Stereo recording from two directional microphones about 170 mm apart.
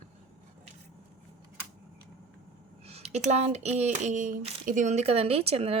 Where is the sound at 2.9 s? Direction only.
40° right (ahead or behind).